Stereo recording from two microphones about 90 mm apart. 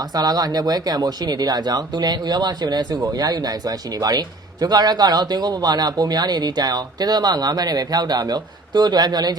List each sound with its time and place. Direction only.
0.0 s speech: 45° right (ahead or behind)